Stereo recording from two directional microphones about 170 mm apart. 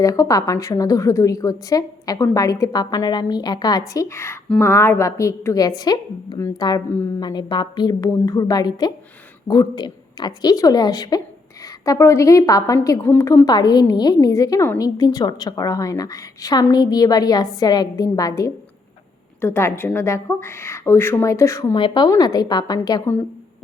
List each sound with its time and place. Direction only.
0.0 s a woman's voice: 20° left (ahead or behind)